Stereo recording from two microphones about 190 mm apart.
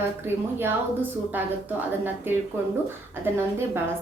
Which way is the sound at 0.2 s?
10° right (ahead or behind).